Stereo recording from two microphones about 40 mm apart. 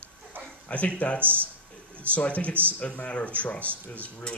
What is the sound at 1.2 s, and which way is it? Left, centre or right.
Speech, right.